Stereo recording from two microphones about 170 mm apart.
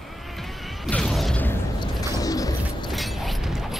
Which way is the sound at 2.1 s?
20° left (ahead or behind).